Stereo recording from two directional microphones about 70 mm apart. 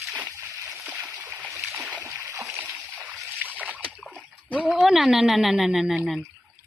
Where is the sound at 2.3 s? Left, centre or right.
Right.